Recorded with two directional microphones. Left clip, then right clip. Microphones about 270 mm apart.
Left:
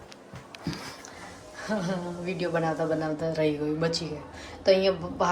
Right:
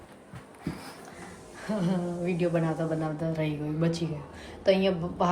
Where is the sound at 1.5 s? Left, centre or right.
Centre.